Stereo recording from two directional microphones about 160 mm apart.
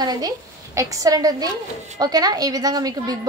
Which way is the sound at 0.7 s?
20° right (ahead or behind).